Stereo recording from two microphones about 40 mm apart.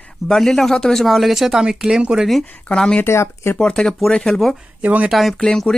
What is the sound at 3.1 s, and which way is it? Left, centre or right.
Speech, left.